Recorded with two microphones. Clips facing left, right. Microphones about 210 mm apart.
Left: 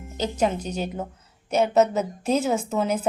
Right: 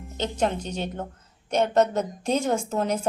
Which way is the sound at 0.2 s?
10° left (ahead or behind).